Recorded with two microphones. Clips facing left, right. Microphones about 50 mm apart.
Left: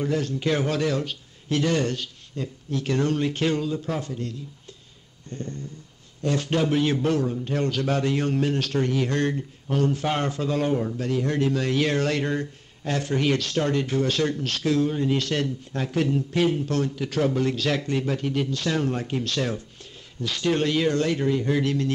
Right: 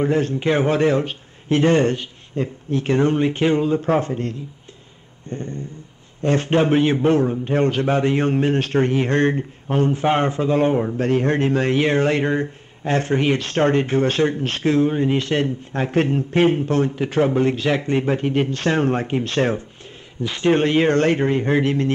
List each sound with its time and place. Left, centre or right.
0.0 s a man's voice: right
5.3 s a sound: right
6.2 s a man's voice: right